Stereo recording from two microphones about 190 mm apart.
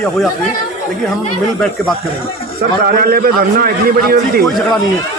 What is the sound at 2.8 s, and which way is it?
A man's voice, 50° right (ahead or behind).